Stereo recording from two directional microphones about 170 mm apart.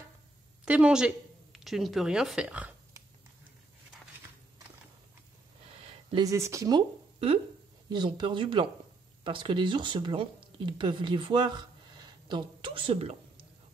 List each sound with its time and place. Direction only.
0.7 s speech: 5° right (ahead or behind)
6.0 s speech: 20° right (ahead or behind)
7.9 s speech: 25° right (ahead or behind)